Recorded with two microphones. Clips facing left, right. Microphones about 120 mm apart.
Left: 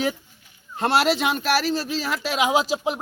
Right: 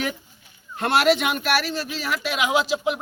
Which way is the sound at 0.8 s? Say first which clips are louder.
Right 1 dB; 30° left (ahead or behind).